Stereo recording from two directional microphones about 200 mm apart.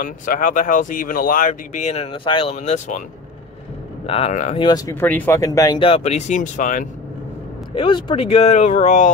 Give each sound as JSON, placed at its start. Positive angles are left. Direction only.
{"t": 0.0, "sound": "speech", "side_deg": 40}
{"t": 4.0, "sound": "speech", "side_deg": 30}
{"t": 4.6, "sound": "speech", "side_deg": 20}
{"t": 5.8, "sound": "speech", "side_deg": 30}
{"t": 7.7, "sound": "speech", "side_deg": 25}